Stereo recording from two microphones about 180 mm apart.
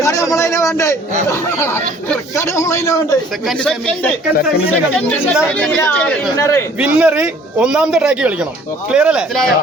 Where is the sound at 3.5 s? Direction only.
5° left (ahead or behind).